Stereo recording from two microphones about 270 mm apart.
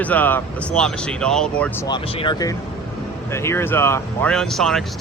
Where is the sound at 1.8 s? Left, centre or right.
Centre.